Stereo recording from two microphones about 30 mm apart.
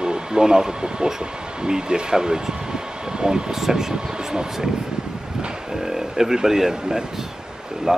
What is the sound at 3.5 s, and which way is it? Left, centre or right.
Speech, centre.